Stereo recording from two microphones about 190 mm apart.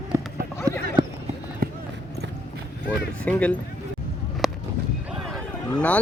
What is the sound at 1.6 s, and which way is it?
Basketball bounce, 50° right (ahead or behind).